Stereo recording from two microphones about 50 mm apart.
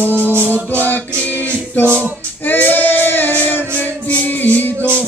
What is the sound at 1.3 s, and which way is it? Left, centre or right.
Music, right.